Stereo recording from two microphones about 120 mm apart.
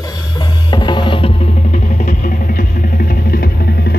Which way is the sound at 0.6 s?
40° left (ahead or behind).